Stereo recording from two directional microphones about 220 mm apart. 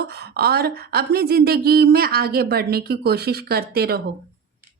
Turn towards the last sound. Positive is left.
turn(degrees=-45)  # may be behind; listen again after turning